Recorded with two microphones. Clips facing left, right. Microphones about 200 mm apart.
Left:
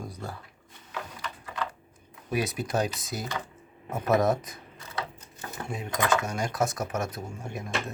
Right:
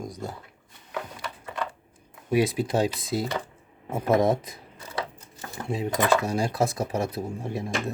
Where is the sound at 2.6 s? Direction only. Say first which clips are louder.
Right 4 dB; 25° right (ahead or behind).